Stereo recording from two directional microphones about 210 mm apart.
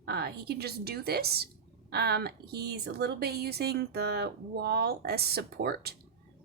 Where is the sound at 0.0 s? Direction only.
50° right (ahead or behind).